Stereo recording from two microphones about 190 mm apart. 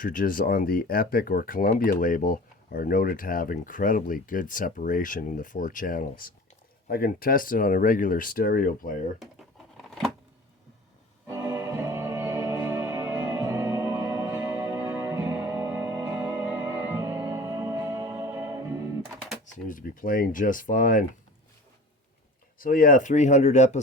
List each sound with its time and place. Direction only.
0.0 s speech: 50° left (ahead or behind)
9.7 s a sound: centre (ahead or behind)
11.3 s music: 15° right (ahead or behind)
19.6 s speech: 45° left (ahead or behind)
22.5 s speech: 50° left (ahead or behind)